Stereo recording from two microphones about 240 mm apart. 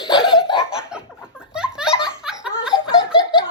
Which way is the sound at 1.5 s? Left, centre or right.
Centre.